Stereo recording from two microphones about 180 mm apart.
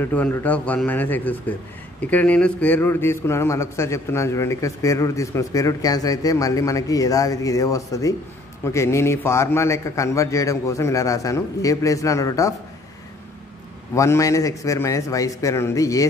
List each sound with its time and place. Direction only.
0.0 s a man's voice: 10° left (ahead or behind)
13.9 s a man's voice: 15° left (ahead or behind)